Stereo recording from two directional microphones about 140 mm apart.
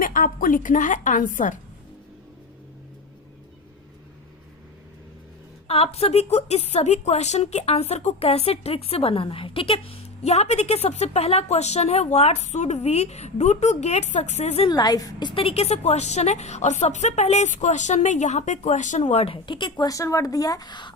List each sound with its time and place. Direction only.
0.0 s a woman's voice: 75° left (ahead or behind)
5.6 s a woman's voice: 45° left (ahead or behind)
14.7 s a woman's voice: 30° left (ahead or behind)